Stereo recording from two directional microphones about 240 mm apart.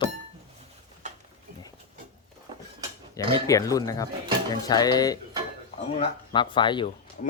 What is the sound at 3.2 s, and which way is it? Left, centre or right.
Speech, centre.